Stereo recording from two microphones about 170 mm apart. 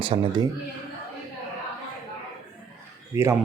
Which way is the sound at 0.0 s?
30° right (ahead or behind).